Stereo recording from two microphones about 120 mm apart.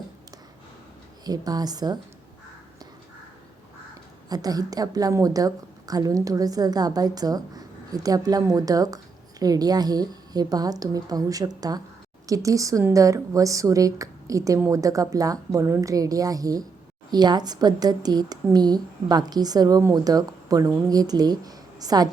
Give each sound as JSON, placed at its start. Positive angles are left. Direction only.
{"t": 1.2, "sound": "a woman's voice", "side_deg": -35}
{"t": 4.3, "sound": "a woman's voice", "side_deg": -30}